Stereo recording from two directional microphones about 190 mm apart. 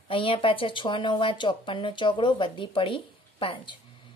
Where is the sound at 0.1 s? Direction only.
30° left (ahead or behind).